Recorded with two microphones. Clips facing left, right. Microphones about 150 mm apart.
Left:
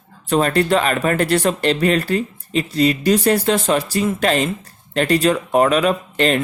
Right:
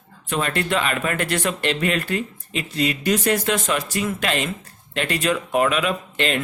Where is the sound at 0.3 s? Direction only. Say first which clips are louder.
Left 7 dB; 35° left (ahead or behind).